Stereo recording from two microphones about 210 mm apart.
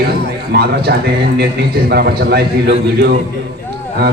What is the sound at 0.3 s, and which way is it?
A man's voice, 50° right (ahead or behind).